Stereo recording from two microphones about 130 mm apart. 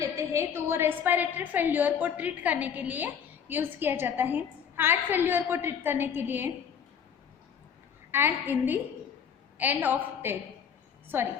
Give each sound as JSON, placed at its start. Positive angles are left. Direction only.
{"t": 0.0, "sound": "a woman's voice", "side_deg": -20}
{"t": 8.1, "sound": "a woman's voice", "side_deg": -15}